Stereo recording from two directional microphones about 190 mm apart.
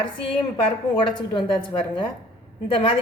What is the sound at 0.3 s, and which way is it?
A woman's voice, 25° left (ahead or behind).